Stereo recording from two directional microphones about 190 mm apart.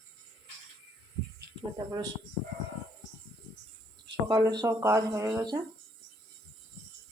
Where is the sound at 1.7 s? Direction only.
20° right (ahead or behind).